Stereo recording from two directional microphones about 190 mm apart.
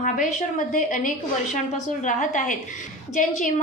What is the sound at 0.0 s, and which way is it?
A woman's voice, 45° left (ahead or behind).